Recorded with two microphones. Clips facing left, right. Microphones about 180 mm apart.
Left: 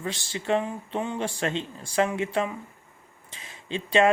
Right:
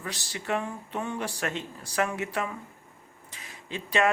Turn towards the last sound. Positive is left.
turn(degrees=25)  # may be behind; listen again after turning